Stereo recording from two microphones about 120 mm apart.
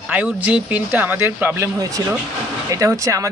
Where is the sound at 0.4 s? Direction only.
10° right (ahead or behind).